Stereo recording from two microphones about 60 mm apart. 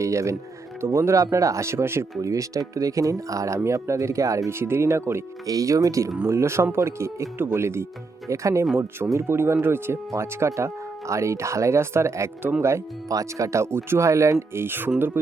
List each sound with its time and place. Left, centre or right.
0.0 s speech: right
2.3 s speech: right
4.5 s speech: right
5.5 s speech: right
6.2 s speech: right
8.3 s speech: right
9.2 s speech: right
10.1 s speech: right
14.6 s speech: right